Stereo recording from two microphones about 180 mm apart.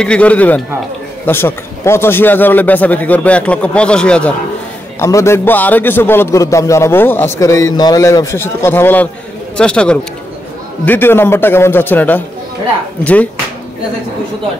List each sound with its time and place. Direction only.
0.0 s a man's voice: 5° left (ahead or behind)